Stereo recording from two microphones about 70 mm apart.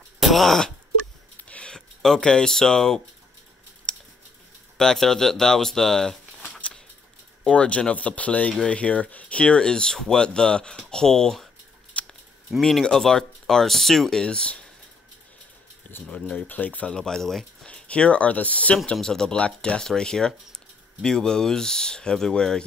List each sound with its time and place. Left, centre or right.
0.2 s groan: centre
1.5 s a sound: centre
2.0 s speech: centre
4.7 s speech: centre
7.4 s speech: centre
11.9 s scissors: centre
12.6 s speech: centre
15.8 s a sound: left
16.4 s speech: left
16.9 s speech: centre
17.6 s speech: centre
18.9 s speech: centre